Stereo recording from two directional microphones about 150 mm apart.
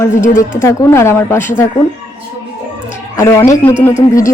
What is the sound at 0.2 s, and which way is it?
Speech, 60° left (ahead or behind).